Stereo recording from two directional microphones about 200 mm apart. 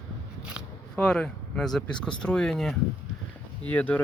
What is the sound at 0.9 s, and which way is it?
Speech, 5° left (ahead or behind).